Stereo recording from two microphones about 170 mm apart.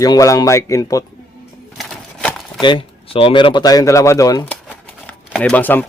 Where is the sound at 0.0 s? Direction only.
20° left (ahead or behind).